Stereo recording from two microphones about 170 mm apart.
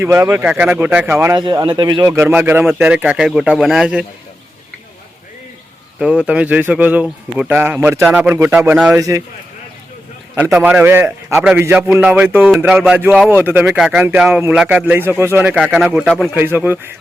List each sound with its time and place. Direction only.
0.0 s speech: 15° right (ahead or behind)
2.0 s speech: 10° right (ahead or behind)
6.0 s speech: 5° right (ahead or behind)
9.0 s a man's voice: 20° right (ahead or behind)
10.3 s a man's voice: 10° right (ahead or behind)
16.4 s speech: 10° right (ahead or behind)